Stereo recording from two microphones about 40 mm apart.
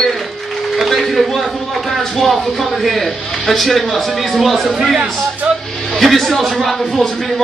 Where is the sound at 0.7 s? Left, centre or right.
Centre.